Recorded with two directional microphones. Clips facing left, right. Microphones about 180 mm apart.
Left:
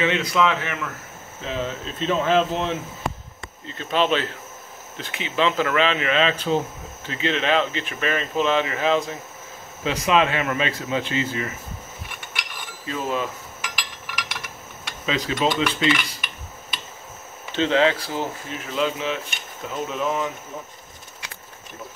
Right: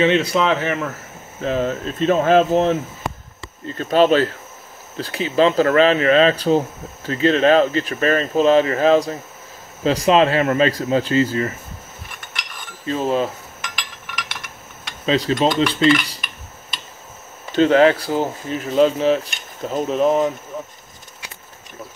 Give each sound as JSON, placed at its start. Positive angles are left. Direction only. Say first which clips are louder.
{"t": 0.0, "sound": "speech", "louder": "right 4 dB", "side_deg": -30}
{"t": 12.8, "sound": "speech", "louder": "right 6 dB", "side_deg": -35}
{"t": 13.6, "sound": "a sound", "louder": "right 1 dB", "side_deg": 5}
{"t": 15.0, "sound": "speech", "louder": "right 5 dB", "side_deg": -35}
{"t": 17.6, "sound": "speech", "louder": "right 6 dB", "side_deg": -45}